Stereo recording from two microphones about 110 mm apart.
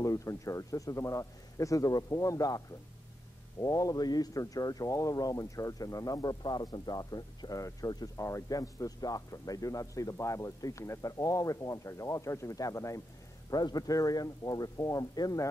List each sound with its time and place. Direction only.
0.0 s speech: 30° left (ahead or behind)
3.6 s speech: 30° left (ahead or behind)